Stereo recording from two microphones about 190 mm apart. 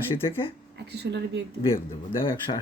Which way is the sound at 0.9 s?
65° right (ahead or behind).